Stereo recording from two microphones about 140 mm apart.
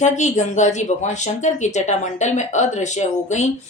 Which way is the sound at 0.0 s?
55° left (ahead or behind).